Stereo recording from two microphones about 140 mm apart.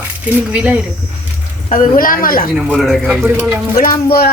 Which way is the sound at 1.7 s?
75° left (ahead or behind).